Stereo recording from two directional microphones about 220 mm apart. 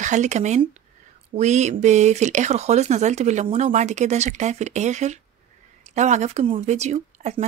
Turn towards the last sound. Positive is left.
turn(degrees=-30)  # may be behind; listen again after turning